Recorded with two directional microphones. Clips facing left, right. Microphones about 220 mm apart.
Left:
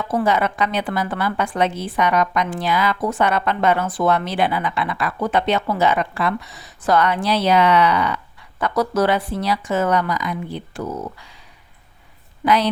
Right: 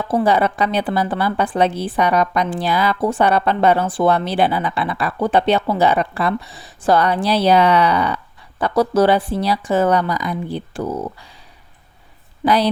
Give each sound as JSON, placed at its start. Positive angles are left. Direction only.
{"t": 0.0, "sound": "a woman's voice", "side_deg": -30}
{"t": 12.5, "sound": "a woman's voice", "side_deg": -35}